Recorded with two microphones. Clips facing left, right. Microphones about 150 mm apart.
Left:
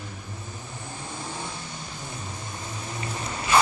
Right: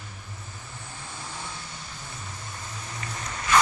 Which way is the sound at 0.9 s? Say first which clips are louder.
Left 4 dB; 20° left (ahead or behind).